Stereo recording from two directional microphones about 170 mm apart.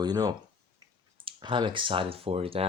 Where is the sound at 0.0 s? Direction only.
25° right (ahead or behind).